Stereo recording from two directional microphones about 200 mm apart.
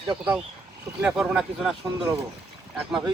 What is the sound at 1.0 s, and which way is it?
Speech, 5° right (ahead or behind).